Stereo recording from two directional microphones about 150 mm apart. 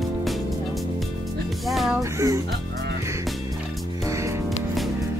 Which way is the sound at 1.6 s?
Centre (ahead or behind).